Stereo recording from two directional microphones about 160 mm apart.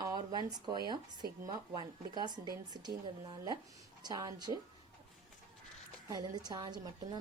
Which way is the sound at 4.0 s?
25° right (ahead or behind).